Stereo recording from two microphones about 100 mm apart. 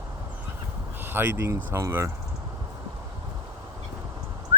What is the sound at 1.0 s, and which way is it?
Speech, 20° right (ahead or behind).